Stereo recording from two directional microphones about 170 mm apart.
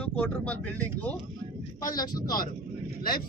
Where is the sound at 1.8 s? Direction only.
25° left (ahead or behind).